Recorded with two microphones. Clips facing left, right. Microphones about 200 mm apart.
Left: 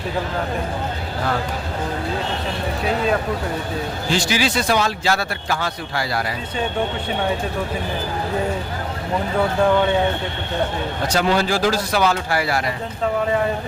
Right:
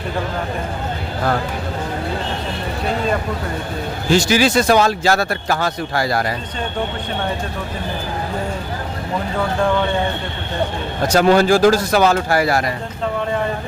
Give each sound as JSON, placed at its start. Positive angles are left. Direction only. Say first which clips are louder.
{"t": 4.1, "sound": "speech", "louder": "right 7 dB", "side_deg": -45}
{"t": 11.1, "sound": "speech", "louder": "right 7 dB", "side_deg": -45}